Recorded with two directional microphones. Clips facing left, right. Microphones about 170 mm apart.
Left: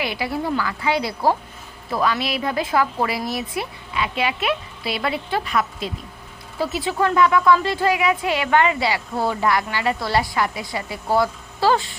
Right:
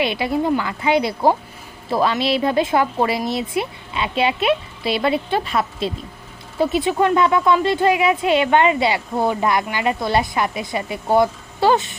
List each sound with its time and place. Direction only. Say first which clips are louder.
0.0 s speech: right 5 dB; 25° right (ahead or behind)